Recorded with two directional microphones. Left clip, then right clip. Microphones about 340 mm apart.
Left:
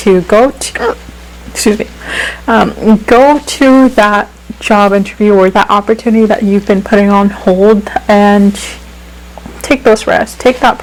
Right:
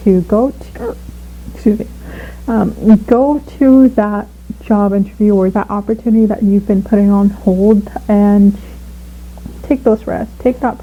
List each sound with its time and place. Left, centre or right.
0.1 s speech: centre